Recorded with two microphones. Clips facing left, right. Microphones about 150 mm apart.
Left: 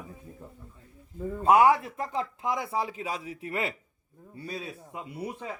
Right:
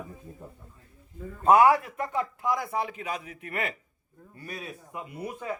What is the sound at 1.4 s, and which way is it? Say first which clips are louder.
A man's voice: right 1 dB; 15° left (ahead or behind).